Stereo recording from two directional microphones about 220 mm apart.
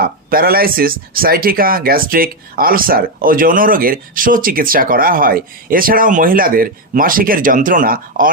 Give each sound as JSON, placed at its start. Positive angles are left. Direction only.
{"t": 0.0, "sound": "speech", "side_deg": -40}